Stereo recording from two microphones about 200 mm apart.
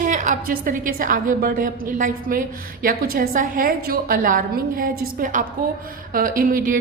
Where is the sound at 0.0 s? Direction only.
40° right (ahead or behind).